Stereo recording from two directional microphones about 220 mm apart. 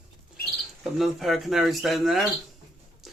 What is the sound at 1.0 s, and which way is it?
Speech, centre (ahead or behind).